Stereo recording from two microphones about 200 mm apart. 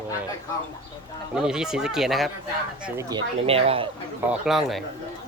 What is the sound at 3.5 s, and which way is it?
Speech, 30° right (ahead or behind).